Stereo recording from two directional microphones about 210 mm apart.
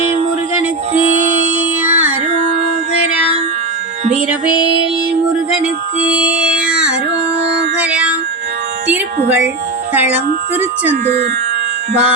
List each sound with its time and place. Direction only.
0.9 s music: 35° right (ahead or behind)
1.8 s music: 10° right (ahead or behind)
6.1 s music: 5° right (ahead or behind)
7.8 s music: 5° right (ahead or behind)
9.9 s speech: 10° right (ahead or behind)